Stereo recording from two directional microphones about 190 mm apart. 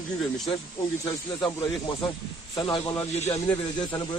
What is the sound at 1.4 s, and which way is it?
Speech, 25° left (ahead or behind).